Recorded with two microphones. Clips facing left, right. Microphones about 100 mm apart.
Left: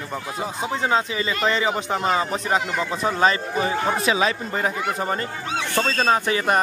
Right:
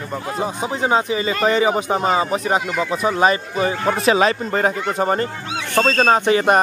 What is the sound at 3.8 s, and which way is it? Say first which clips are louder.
Speech: right 8 dB; 55° right (ahead or behind).